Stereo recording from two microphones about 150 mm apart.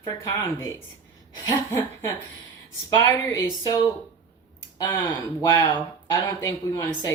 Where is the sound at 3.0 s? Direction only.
20° left (ahead or behind).